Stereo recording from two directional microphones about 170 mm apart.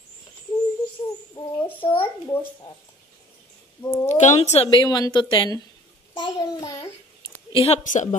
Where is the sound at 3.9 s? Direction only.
45° left (ahead or behind).